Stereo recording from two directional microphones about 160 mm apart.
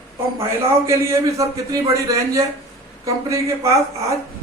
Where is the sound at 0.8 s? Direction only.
20° right (ahead or behind).